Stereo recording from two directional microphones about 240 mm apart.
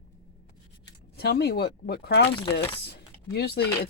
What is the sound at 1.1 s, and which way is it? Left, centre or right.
Speech, left.